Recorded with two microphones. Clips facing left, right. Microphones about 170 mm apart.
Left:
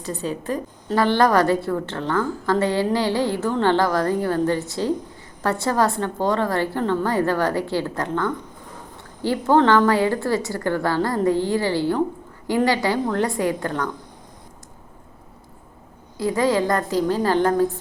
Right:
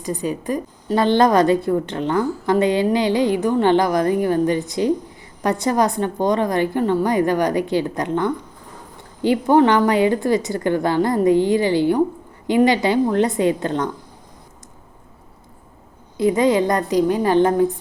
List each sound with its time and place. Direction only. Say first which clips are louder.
0.0 s a woman's voice: right 3 dB; 15° right (ahead or behind)
16.1 s a woman's voice: right 4 dB; 20° right (ahead or behind)